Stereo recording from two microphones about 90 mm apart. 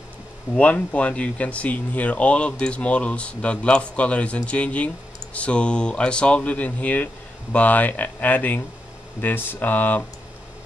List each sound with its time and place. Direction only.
0.6 s speech: 15° left (ahead or behind)